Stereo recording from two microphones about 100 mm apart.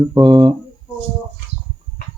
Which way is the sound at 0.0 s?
40° right (ahead or behind).